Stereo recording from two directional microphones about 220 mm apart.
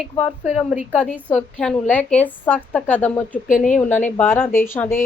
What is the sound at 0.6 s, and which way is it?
A woman's voice, centre (ahead or behind).